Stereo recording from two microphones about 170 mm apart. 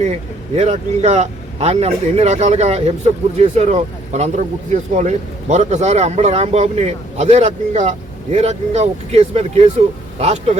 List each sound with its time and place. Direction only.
0.0 s speech: 40° right (ahead or behind)